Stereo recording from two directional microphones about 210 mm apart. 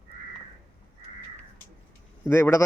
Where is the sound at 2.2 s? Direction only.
10° left (ahead or behind).